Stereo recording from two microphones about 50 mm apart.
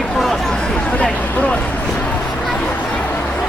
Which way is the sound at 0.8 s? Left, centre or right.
Left.